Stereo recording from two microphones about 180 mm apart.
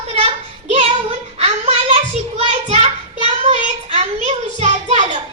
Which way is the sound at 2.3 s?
35° right (ahead or behind).